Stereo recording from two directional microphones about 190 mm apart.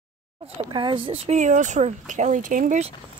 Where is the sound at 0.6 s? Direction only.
25° right (ahead or behind); by 2.9 s 40° right (ahead or behind).